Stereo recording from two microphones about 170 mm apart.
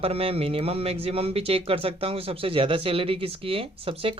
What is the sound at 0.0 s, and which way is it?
Speech, 35° right (ahead or behind).